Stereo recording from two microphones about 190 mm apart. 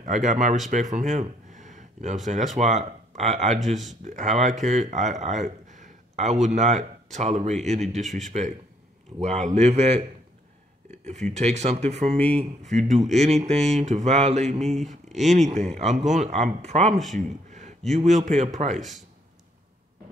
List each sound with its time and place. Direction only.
0.0 s speech: 40° right (ahead or behind)
10.9 s a sound: 35° right (ahead or behind)
11.3 s speech: 35° right (ahead or behind)
17.1 s a sound: 40° right (ahead or behind)
17.9 s speech: 40° right (ahead or behind)
18.8 s speech: centre (ahead or behind)